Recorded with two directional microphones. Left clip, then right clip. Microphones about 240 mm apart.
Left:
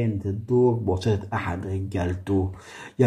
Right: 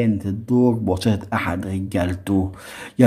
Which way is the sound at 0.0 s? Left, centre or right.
Right.